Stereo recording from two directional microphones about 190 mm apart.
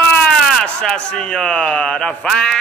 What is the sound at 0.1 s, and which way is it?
Speech, 5° left (ahead or behind).